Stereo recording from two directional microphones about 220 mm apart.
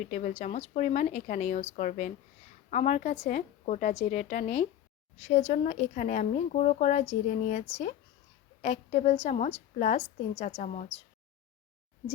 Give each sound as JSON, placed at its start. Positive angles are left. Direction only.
{"t": 0.0, "sound": "speech", "side_deg": 35}